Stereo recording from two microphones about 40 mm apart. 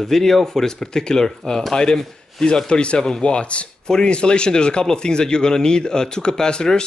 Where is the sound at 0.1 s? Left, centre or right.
Centre.